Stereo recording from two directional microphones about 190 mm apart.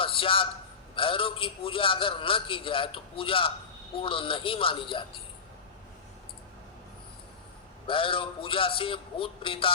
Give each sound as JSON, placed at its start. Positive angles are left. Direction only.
{"t": 0.0, "sound": "a sound", "side_deg": 30}
{"t": 0.9, "sound": "a man's voice", "side_deg": 30}
{"t": 7.9, "sound": "a man's voice", "side_deg": 25}